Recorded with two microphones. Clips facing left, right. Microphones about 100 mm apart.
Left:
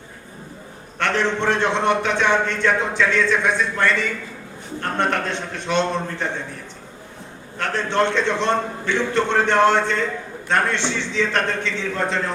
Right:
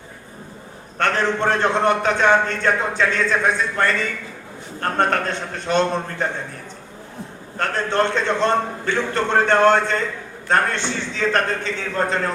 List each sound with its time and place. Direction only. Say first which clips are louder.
0.9 s a man's voice: right 1 dB; 40° right (ahead or behind)
7.6 s a man's voice: even; 45° right (ahead or behind)